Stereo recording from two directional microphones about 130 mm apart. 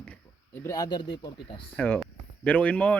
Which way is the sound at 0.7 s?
30° left (ahead or behind).